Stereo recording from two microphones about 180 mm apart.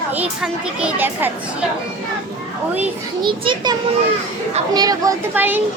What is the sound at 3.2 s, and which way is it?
A child's voice, 25° right (ahead or behind).